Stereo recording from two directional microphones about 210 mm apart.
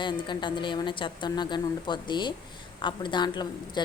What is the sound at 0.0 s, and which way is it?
A woman's voice, 20° left (ahead or behind).